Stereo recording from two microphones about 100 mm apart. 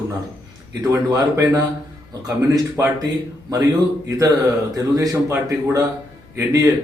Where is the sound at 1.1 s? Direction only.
30° right (ahead or behind).